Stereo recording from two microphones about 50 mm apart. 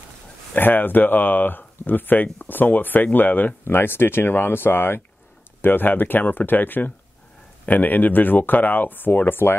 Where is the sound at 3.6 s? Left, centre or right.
Left.